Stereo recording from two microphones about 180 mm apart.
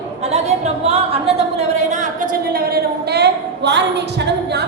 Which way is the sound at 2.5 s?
60° right (ahead or behind).